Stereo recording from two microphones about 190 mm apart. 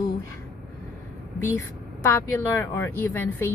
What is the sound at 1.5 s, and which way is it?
Speech, 15° left (ahead or behind).